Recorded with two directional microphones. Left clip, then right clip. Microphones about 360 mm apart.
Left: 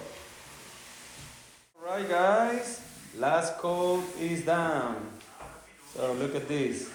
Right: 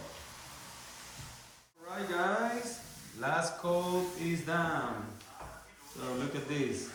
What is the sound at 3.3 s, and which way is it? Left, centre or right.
Mantra, centre.